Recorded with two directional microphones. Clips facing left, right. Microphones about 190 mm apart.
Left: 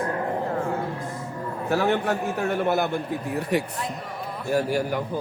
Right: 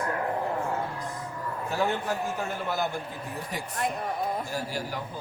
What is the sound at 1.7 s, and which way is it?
A man's voice, 70° left (ahead or behind).